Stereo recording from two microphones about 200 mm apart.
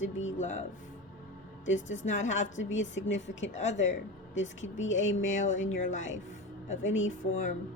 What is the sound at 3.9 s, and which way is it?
Speech, 65° left (ahead or behind).